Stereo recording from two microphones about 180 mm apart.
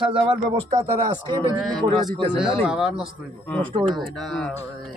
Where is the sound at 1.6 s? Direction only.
Centre (ahead or behind).